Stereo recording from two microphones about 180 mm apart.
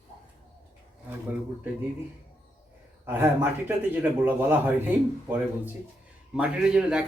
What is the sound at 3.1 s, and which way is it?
A man's voice, 10° right (ahead or behind).